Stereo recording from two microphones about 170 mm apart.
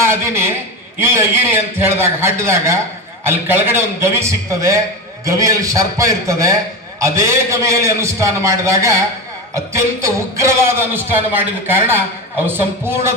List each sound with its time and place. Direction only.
0.1 s a man's voice: 15° right (ahead or behind)